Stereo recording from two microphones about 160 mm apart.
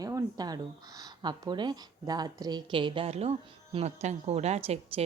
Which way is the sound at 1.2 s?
25° right (ahead or behind).